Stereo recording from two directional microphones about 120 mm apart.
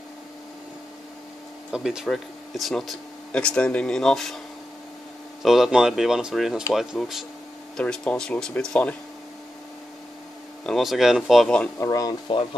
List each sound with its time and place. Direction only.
1.7 s speech: 5° right (ahead or behind)
5.4 s speech: 5° right (ahead or behind)
7.7 s speech: 10° left (ahead or behind)
10.6 s speech: centre (ahead or behind)
11.8 s speech: 30° left (ahead or behind)